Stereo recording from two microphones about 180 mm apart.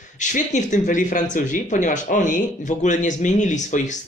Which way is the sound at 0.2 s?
45° left (ahead or behind).